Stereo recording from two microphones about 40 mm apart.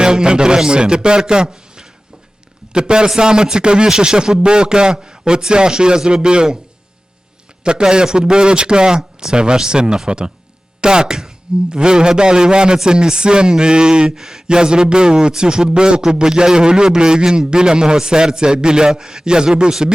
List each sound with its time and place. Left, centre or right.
0.0 s a man's voice: right
7.6 s a man's voice: right
14.2 s a man's voice: centre